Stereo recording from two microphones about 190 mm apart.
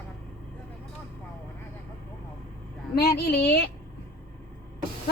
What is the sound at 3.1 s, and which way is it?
Speech, 55° left (ahead or behind).